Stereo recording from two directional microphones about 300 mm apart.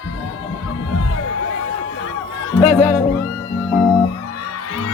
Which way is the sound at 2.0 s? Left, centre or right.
Left.